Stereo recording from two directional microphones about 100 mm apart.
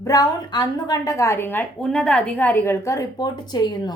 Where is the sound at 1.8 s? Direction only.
5° left (ahead or behind); by 3.9 s 45° left (ahead or behind).